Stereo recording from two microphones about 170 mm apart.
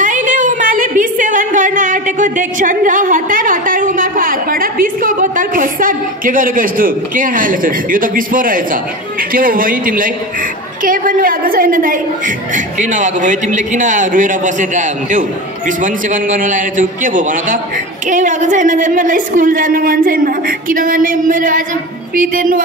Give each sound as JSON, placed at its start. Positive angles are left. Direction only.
{"t": 0.0, "sound": "a woman's voice", "side_deg": -50}